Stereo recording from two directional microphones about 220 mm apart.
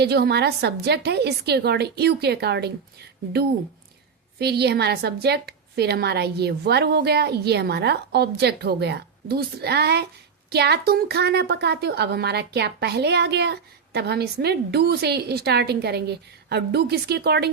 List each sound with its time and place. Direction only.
0.0 s a woman's voice: 50° right (ahead or behind)